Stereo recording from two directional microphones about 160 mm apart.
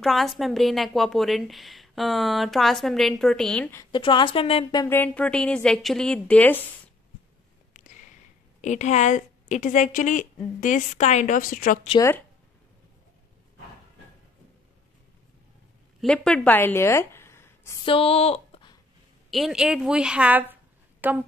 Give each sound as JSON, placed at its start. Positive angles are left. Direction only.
{"t": 0.0, "sound": "a woman's voice", "side_deg": 0}
{"t": 3.9, "sound": "a woman's voice", "side_deg": 30}
{"t": 4.8, "sound": "a woman's voice", "side_deg": 10}
{"t": 8.5, "sound": "a woman's voice", "side_deg": 45}
{"t": 16.0, "sound": "speech", "side_deg": 5}
{"t": 17.8, "sound": "a sound", "side_deg": 35}
{"t": 19.3, "sound": "a woman's voice", "side_deg": 0}